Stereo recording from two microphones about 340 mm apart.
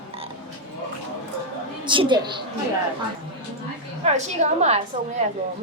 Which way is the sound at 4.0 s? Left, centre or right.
Centre.